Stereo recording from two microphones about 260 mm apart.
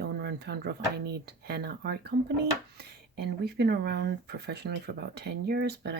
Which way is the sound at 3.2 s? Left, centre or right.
Right.